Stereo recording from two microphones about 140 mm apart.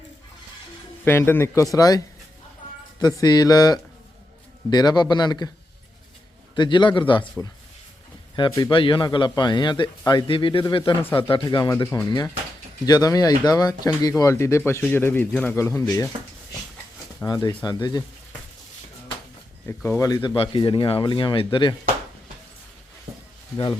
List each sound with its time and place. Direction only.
1.0 s speech: 15° left (ahead or behind)
6.6 s speech: 35° left (ahead or behind)
8.4 s speech: 30° left (ahead or behind)
11.0 s speech: 15° left (ahead or behind)
11.3 s speech: 35° left (ahead or behind)
17.2 s speech: 30° left (ahead or behind)
19.6 s speech: 15° left (ahead or behind)
20.3 s speech: 40° left (ahead or behind)